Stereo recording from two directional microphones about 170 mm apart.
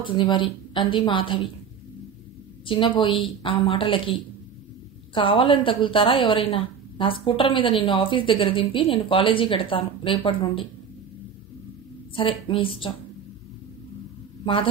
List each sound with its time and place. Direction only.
0.0 s a woman's voice: 30° left (ahead or behind)
2.6 s a woman's voice: 30° left (ahead or behind)
12.2 s a woman's voice: 30° left (ahead or behind)
14.4 s a man's voice: 30° left (ahead or behind)